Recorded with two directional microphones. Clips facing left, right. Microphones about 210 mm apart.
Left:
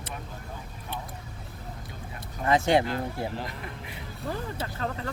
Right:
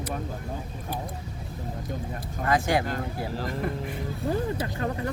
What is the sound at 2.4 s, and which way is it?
Speech, 25° left (ahead or behind).